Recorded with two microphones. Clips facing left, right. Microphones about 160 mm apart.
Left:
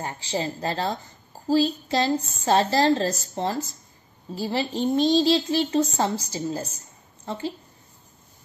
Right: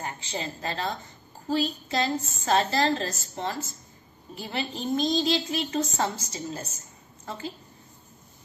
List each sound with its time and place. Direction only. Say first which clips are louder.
0.0 s a woman's voice: left 5 dB; 30° left (ahead or behind)